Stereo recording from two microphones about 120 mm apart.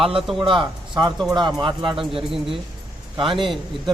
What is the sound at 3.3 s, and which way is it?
Speech, centre (ahead or behind).